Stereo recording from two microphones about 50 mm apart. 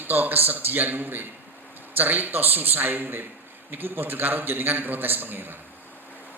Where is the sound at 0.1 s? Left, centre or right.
Right.